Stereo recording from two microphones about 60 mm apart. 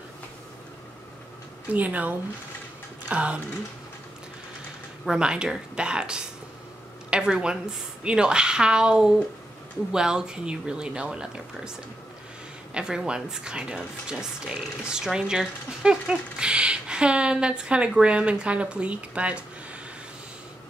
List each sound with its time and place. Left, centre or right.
1.7 s speech: right
3.1 s a sound: centre
5.0 s a woman's voice: centre
12.7 s speech: centre